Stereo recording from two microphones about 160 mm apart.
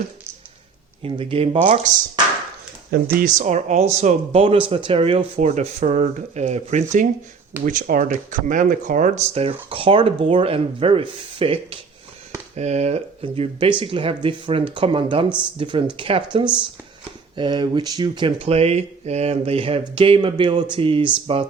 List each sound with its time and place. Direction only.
1.0 s speech: 35° right (ahead or behind)
1.9 s speech: 50° right (ahead or behind); by 21.4 s 35° right (ahead or behind)